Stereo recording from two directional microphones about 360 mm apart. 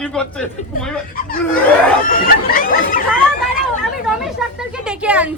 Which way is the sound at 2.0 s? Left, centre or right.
Left.